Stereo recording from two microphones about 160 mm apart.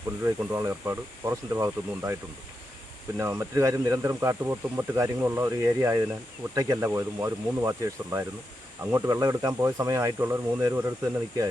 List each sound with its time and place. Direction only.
0.3 s speech: 15° right (ahead or behind)
3.2 s speech: 20° right (ahead or behind)